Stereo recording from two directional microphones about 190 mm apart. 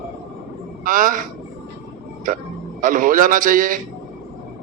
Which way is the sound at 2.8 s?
45° right (ahead or behind).